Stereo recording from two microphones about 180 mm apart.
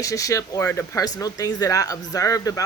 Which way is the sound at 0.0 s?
20° left (ahead or behind).